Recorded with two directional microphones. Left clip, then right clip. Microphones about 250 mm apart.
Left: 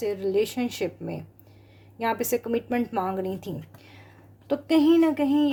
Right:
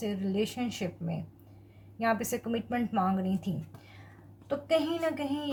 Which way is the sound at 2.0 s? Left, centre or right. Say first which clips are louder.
Left 4 dB; left.